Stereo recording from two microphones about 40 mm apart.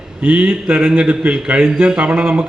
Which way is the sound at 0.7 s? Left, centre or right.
Right.